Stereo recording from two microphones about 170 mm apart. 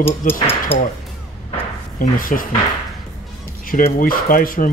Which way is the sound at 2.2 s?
55° left (ahead or behind).